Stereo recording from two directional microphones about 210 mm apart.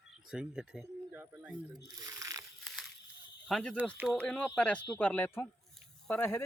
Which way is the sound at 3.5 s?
5° left (ahead or behind).